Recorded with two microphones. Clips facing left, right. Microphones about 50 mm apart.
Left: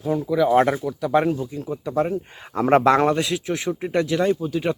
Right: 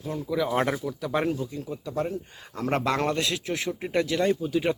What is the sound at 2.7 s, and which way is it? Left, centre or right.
Speech, left.